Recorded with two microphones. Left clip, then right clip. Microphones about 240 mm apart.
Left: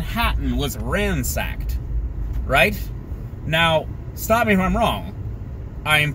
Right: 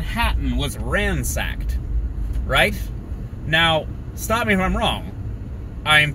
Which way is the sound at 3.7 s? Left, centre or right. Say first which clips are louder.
Left 2 dB; centre.